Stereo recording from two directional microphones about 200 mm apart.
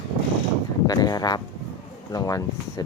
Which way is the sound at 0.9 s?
20° left (ahead or behind).